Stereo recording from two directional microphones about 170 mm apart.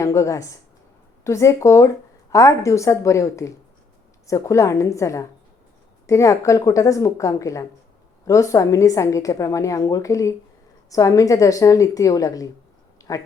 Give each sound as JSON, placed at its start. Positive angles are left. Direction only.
{"t": 0.0, "sound": "a woman's voice", "side_deg": 20}